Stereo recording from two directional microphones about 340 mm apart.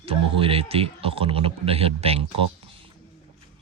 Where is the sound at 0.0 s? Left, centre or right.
Centre.